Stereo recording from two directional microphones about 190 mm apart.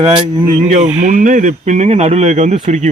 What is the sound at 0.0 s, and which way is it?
Speech, 25° right (ahead or behind).